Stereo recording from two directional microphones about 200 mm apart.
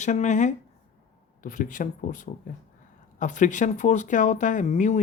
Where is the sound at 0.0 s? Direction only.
35° left (ahead or behind).